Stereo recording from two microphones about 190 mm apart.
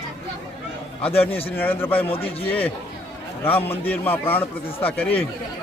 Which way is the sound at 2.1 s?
30° left (ahead or behind).